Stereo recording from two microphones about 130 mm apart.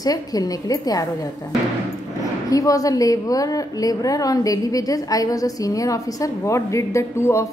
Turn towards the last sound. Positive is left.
turn(degrees=20)  # may be behind; listen again after turning